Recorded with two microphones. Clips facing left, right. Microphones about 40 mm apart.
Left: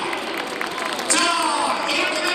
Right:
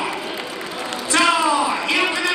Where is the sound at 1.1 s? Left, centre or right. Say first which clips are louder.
Right 4 dB; right.